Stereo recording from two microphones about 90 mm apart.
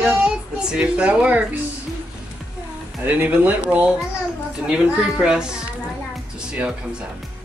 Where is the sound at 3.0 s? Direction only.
20° right (ahead or behind).